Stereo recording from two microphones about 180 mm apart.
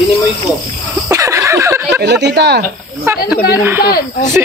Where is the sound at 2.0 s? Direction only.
70° right (ahead or behind).